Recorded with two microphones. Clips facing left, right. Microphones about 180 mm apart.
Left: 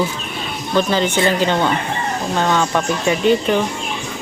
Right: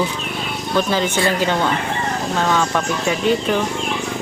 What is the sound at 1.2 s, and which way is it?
Speech, 20° left (ahead or behind).